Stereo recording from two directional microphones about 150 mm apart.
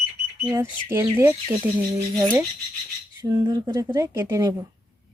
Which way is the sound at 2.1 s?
30° right (ahead or behind).